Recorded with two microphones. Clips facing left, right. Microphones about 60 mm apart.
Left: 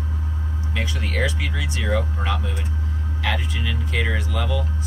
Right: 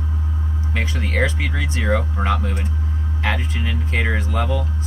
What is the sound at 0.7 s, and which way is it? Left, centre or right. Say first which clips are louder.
Speech: right 3 dB; right.